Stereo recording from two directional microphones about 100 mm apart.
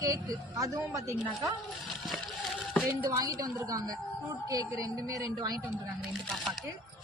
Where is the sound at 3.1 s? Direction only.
35° right (ahead or behind).